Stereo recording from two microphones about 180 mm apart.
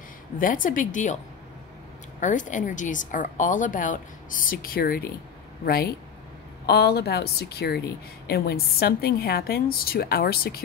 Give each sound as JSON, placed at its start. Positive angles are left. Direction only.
{"t": 0.4, "sound": "a woman's voice", "side_deg": 50}